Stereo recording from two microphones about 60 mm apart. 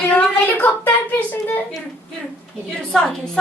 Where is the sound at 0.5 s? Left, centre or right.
Left.